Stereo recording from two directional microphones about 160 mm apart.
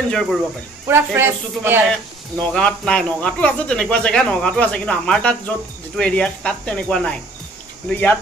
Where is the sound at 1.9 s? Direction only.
5° left (ahead or behind).